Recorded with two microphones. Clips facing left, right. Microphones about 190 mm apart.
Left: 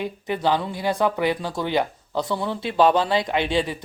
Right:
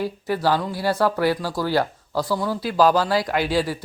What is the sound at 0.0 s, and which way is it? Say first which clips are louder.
Speech: right 1 dB; 20° left (ahead or behind).